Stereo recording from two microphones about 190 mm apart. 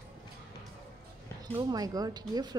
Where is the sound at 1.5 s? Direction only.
20° right (ahead or behind).